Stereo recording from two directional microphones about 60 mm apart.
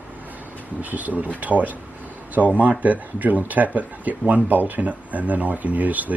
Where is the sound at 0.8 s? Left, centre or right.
Right.